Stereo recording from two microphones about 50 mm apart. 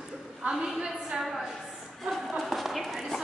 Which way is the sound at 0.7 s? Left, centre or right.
Centre.